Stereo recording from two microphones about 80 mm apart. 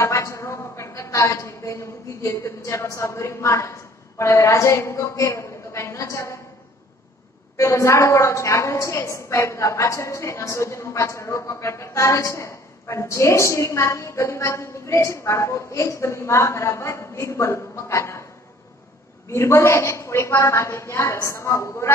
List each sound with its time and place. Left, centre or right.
0.0 s a woman's voice: left
7.5 s a woman's voice: left
19.2 s a woman's voice: left